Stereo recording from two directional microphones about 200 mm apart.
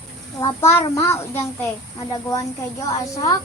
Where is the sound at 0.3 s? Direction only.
15° left (ahead or behind).